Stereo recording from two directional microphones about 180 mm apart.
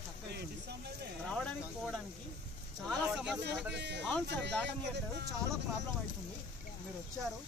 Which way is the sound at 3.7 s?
70° right (ahead or behind).